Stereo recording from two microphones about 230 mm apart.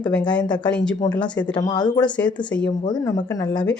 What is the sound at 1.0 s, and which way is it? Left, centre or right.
Speech, centre.